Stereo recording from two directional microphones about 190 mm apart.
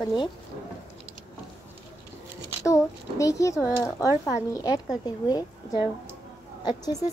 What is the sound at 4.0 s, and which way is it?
Speech, 15° right (ahead or behind).